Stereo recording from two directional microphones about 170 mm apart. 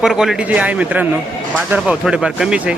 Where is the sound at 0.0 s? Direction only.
Centre (ahead or behind).